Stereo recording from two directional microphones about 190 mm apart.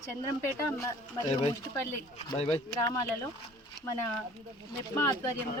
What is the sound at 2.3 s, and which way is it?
Speech, 30° left (ahead or behind).